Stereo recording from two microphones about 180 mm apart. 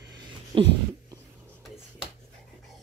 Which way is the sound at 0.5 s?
30° right (ahead or behind).